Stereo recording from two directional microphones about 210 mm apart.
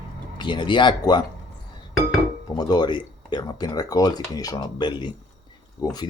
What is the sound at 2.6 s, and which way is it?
Speech, 20° left (ahead or behind).